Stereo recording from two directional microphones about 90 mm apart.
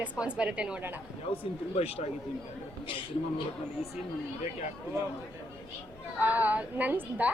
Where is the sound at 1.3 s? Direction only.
85° left.